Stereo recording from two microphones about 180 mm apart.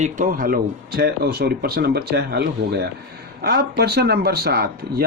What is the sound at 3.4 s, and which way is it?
Speech, 60° right (ahead or behind).